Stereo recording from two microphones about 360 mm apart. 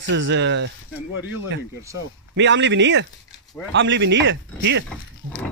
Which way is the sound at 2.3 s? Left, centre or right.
Right.